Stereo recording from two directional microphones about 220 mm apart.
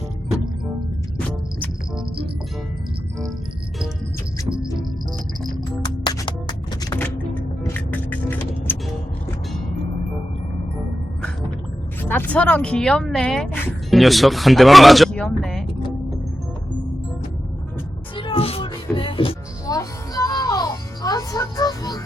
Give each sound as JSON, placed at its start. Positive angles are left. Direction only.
{"t": 5.8, "sound": "music", "side_deg": 20}
{"t": 12.0, "sound": "speech", "side_deg": 10}
{"t": 18.2, "sound": "music", "side_deg": 25}